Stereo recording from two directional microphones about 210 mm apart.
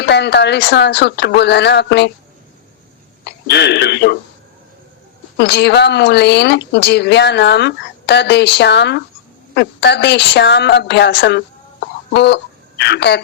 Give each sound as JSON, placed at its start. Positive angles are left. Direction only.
{"t": 0.0, "sound": "a woman's voice", "side_deg": 55}
{"t": 3.2, "sound": "speech", "side_deg": 55}
{"t": 5.4, "sound": "a woman's voice", "side_deg": 55}